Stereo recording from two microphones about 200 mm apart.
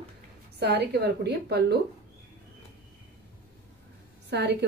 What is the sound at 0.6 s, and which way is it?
A woman's voice, 55° right (ahead or behind).